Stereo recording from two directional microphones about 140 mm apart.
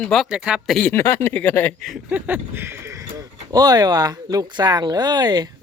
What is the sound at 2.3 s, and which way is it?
Speech, 15° right (ahead or behind).